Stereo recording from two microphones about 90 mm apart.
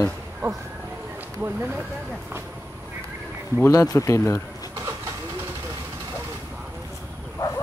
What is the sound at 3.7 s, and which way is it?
Speech, 40° left (ahead or behind).